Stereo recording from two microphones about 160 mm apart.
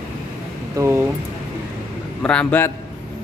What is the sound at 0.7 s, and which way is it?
Speech, 15° right (ahead or behind).